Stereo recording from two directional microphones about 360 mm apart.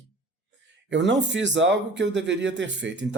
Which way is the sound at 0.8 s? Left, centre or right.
Right.